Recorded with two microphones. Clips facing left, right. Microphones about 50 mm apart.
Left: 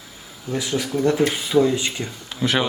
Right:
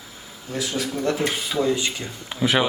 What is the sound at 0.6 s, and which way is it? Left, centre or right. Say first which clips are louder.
Speech: left 3 dB; left.